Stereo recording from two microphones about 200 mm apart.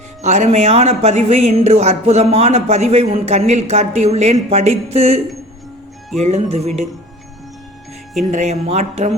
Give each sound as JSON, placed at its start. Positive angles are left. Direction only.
{"t": 0.2, "sound": "speech", "side_deg": -35}
{"t": 8.2, "sound": "speech", "side_deg": -35}